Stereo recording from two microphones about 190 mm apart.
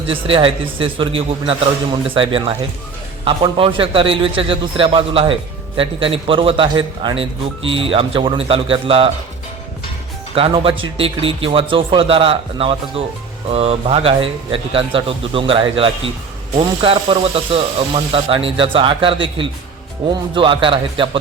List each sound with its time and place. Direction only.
0.1 s a man's voice: 30° right (ahead or behind)
10.3 s a man's voice: 30° right (ahead or behind)